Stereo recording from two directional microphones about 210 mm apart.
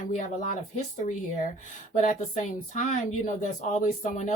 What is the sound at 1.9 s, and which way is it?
Speech, 35° left (ahead or behind).